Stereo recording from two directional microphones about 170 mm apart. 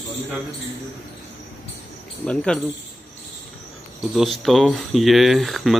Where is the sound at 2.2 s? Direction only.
5° left (ahead or behind).